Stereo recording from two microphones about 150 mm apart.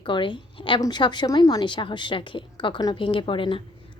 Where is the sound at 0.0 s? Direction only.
35° left (ahead or behind).